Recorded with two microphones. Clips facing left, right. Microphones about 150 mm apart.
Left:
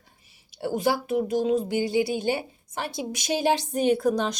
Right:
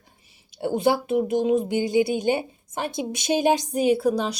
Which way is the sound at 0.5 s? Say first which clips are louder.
Right 3 dB; 20° right (ahead or behind).